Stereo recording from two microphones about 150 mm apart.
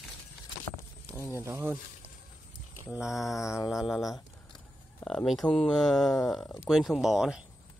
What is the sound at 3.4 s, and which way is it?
Speech, 20° left (ahead or behind).